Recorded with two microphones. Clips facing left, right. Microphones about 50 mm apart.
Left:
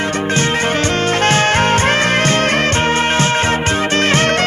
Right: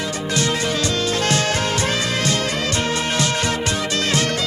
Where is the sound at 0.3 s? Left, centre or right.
Left.